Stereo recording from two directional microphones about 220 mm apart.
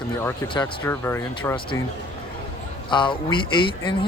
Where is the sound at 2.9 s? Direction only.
20° left (ahead or behind).